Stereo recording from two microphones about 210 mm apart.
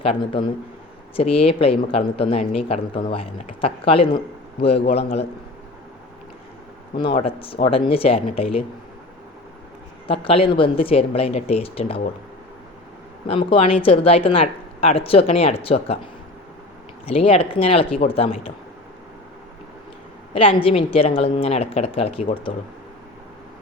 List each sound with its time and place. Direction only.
0.0 s speech: 25° left (ahead or behind)
7.1 s speech: 30° left (ahead or behind)
10.1 s speech: 25° left (ahead or behind)
13.2 s speech: 25° left (ahead or behind)
17.1 s speech: 25° left (ahead or behind)
20.3 s speech: 25° left (ahead or behind)